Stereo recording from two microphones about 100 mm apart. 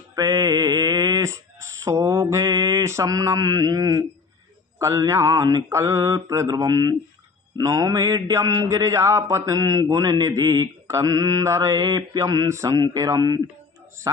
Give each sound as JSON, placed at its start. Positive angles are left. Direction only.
{"t": 0.1, "sound": "a sound", "side_deg": -35}
{"t": 2.4, "sound": "mantra", "side_deg": -35}
{"t": 4.7, "sound": "a man's voice", "side_deg": -30}